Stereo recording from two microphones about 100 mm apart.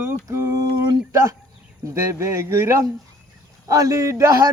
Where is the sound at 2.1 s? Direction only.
30° right (ahead or behind).